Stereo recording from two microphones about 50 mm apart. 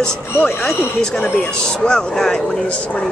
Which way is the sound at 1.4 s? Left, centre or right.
Centre.